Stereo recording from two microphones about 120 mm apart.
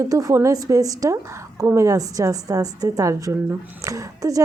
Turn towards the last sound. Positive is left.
turn(degrees=-30)  # may be behind; listen again after turning